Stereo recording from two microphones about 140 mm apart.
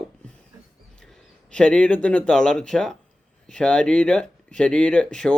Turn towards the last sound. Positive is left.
turn(degrees=5)  # may be behind; listen again after turning